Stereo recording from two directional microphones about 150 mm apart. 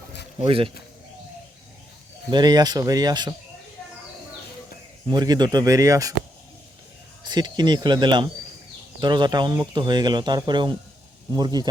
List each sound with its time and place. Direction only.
0.3 s a man's voice: 35° right (ahead or behind)
2.3 s speech: 25° right (ahead or behind)
5.0 s speech: 25° right (ahead or behind)
7.3 s speech: 30° right (ahead or behind)